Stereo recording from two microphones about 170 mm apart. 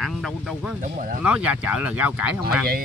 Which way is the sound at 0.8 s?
50° right (ahead or behind).